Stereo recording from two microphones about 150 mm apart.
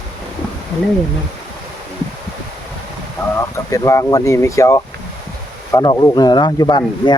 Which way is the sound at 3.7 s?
20° left (ahead or behind).